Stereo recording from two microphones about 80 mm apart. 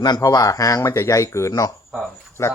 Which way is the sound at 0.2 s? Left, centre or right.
Left.